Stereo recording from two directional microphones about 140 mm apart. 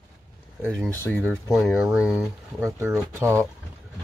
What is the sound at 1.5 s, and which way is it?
Speech, centre (ahead or behind).